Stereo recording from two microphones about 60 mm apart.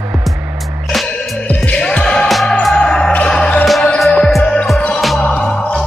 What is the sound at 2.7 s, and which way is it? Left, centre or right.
Music, centre.